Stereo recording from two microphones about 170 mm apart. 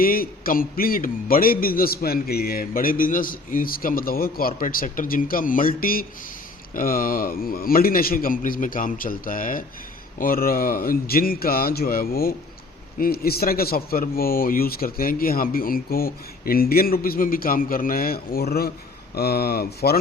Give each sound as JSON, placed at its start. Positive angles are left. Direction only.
{"t": 0.0, "sound": "a man's voice", "side_deg": 60}